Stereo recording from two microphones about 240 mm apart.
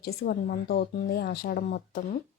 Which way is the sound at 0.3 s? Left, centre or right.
Left.